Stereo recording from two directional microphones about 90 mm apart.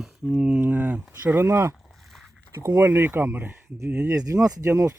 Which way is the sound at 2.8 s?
25° right (ahead or behind).